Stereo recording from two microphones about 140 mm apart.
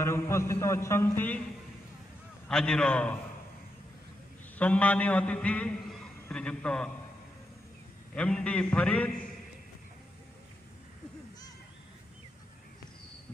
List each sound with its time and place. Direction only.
0.0 s a sound: 20° left (ahead or behind)
2.4 s a man's voice: 5° left (ahead or behind)
4.6 s a man's voice: 10° left (ahead or behind)
8.1 s a man's voice: 5° left (ahead or behind)